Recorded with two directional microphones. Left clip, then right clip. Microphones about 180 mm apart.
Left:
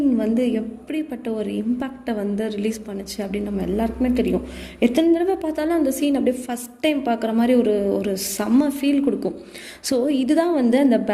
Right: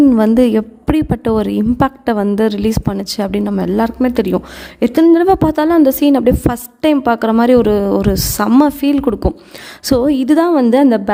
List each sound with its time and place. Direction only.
0.1 s a woman's voice: 50° right (ahead or behind)